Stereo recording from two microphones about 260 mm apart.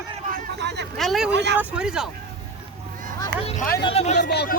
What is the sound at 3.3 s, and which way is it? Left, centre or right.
Speech, right.